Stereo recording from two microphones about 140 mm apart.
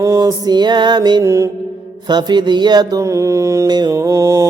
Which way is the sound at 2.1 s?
30° right (ahead or behind).